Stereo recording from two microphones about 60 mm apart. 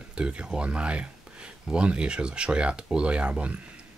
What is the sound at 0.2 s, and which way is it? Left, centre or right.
Speech, centre.